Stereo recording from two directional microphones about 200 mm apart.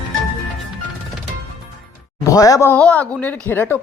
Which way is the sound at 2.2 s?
15° left (ahead or behind).